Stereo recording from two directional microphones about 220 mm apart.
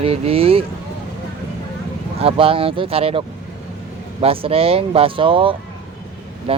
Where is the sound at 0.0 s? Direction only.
25° right (ahead or behind).